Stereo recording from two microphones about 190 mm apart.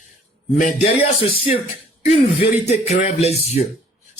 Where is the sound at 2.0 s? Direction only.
35° left (ahead or behind).